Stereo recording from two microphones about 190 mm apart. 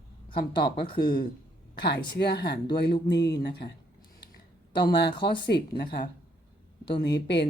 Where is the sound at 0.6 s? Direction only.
55° left (ahead or behind).